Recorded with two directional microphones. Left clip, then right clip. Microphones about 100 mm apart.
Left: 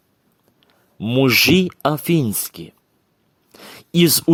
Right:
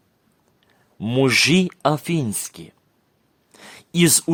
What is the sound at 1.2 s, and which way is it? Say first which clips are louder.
Speech: left 3 dB; 30° left (ahead or behind).